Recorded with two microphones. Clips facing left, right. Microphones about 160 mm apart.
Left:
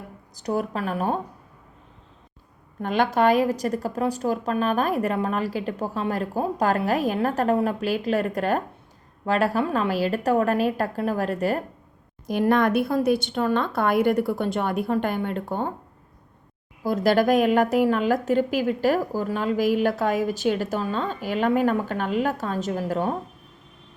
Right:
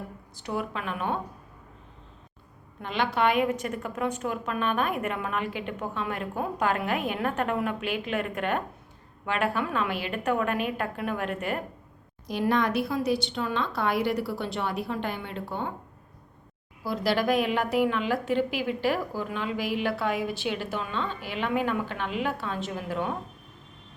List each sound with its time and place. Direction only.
0.3 s a woman's voice: 40° left (ahead or behind)
2.8 s a woman's voice: 45° left (ahead or behind)
12.3 s a woman's voice: 50° left (ahead or behind)
16.8 s a woman's voice: 45° left (ahead or behind)